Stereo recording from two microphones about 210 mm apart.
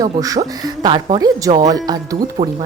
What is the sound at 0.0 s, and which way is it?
Speech, 15° right (ahead or behind).